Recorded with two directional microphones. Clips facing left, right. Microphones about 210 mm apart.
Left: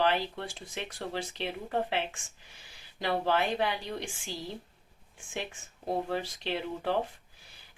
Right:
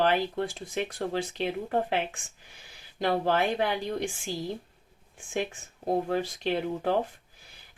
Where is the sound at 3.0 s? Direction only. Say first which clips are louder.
Right 3 dB; 45° right (ahead or behind).